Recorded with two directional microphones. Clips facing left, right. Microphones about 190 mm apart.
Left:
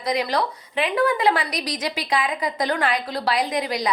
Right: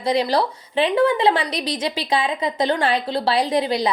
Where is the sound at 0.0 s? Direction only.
30° right (ahead or behind).